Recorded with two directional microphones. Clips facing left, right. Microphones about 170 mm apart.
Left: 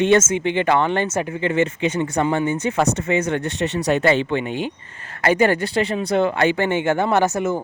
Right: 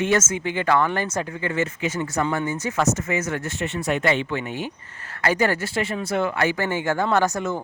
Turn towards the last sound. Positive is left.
turn(degrees=20)  # may be behind; listen again after turning